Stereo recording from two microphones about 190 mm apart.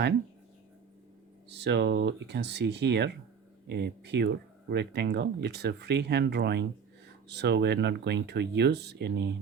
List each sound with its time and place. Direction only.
1.5 s speech: 65° right (ahead or behind)